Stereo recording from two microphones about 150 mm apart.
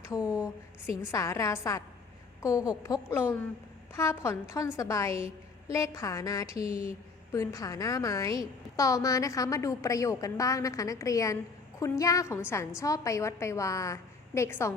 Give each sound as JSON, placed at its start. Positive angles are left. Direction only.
{"t": 0.1, "sound": "a woman's voice", "side_deg": 25}